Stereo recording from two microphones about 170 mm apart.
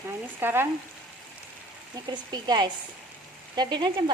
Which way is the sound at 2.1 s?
25° right (ahead or behind).